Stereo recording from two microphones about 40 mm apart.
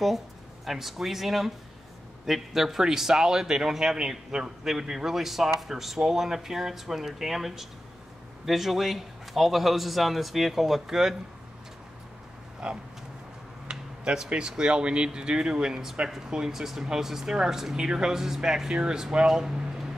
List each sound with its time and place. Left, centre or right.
0.7 s a man's voice: centre
12.6 s speech: right
13.7 s a sound: right
14.2 s speech: centre